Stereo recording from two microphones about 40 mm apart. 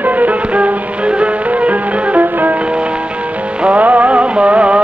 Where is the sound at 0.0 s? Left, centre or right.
Right.